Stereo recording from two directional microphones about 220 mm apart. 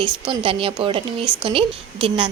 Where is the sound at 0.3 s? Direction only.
25° right (ahead or behind).